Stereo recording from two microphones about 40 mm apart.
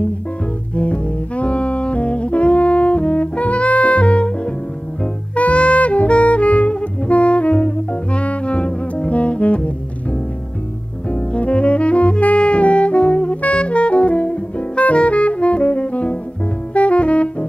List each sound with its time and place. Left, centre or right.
0.7 s saxophone: left
5.0 s music: left
11.1 s saxophone: left
16.7 s music: left